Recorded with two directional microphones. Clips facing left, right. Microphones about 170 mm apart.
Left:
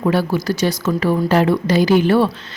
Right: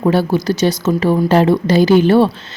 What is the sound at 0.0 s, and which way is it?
A woman's voice, 30° right (ahead or behind).